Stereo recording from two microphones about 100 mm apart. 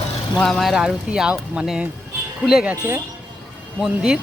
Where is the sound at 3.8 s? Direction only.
5° right (ahead or behind).